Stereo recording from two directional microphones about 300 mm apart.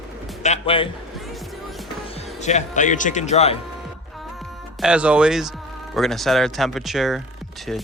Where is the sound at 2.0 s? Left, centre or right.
Left.